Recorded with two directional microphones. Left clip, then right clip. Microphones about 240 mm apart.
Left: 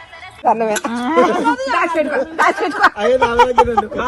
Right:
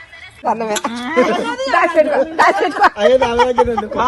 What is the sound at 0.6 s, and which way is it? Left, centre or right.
Speech, left.